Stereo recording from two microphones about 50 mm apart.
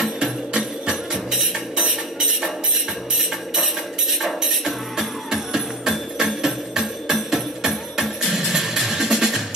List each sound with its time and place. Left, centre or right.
0.2 s music: centre
3.2 s music: centre